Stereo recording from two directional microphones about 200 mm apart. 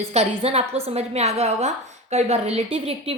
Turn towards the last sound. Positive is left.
turn(degrees=-30)  # may be behind; listen again after turning